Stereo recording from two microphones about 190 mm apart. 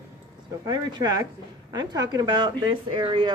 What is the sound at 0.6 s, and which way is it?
Speech, 25° right (ahead or behind).